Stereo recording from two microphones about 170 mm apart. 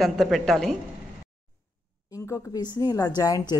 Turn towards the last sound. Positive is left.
turn(degrees=25)  # may be behind; listen again after turning